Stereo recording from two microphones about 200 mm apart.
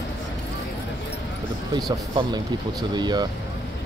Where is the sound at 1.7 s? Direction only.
20° right (ahead or behind).